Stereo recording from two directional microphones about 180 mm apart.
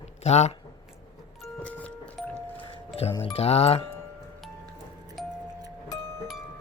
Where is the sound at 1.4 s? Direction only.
5° left (ahead or behind).